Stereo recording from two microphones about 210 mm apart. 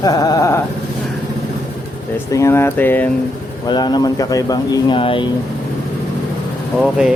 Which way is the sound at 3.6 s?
20° left (ahead or behind).